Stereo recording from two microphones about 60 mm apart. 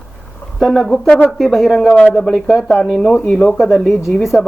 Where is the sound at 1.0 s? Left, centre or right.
Left.